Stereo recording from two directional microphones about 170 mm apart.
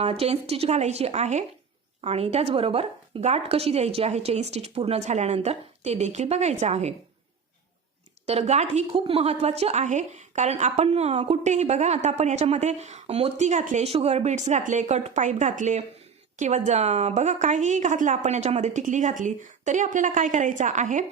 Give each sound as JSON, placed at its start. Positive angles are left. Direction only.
{"t": 0.0, "sound": "a woman's voice", "side_deg": -35}
{"t": 8.3, "sound": "a woman's voice", "side_deg": -40}